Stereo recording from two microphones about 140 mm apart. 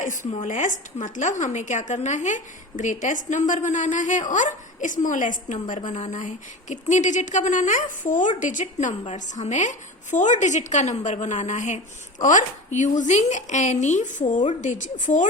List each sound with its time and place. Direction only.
0.0 s speech: 65° left (ahead or behind)